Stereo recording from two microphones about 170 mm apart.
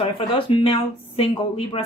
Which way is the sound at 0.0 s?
30° left (ahead or behind).